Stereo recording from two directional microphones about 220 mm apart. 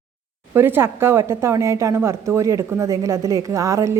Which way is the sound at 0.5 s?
10° right (ahead or behind).